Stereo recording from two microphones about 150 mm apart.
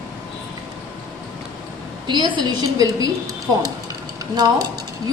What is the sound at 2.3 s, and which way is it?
Speech, 25° right (ahead or behind).